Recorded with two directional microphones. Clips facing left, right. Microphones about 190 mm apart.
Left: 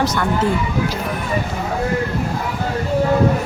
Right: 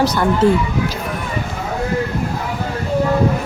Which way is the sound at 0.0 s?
35° right (ahead or behind).